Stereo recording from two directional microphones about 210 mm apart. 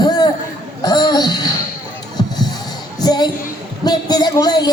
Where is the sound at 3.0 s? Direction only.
20° left (ahead or behind).